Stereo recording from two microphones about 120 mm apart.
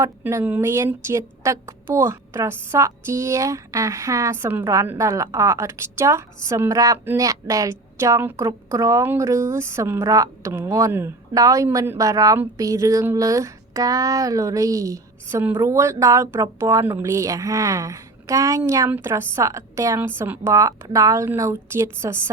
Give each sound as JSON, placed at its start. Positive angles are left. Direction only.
{"t": 0.0, "sound": "a woman's voice", "side_deg": -25}